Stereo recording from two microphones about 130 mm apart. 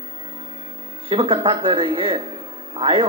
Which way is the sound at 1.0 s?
40° right (ahead or behind).